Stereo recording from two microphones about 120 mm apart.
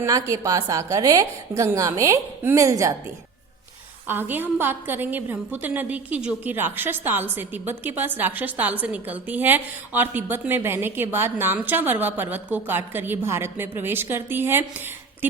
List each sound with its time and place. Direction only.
0.0 s a woman's voice: 25° right (ahead or behind)
4.0 s a woman's voice: 15° right (ahead or behind)